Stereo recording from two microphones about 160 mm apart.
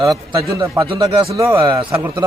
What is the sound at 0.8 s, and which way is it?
Speech, 30° right (ahead or behind).